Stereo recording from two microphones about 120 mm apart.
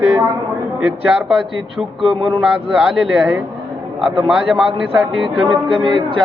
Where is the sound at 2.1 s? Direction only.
45° right (ahead or behind).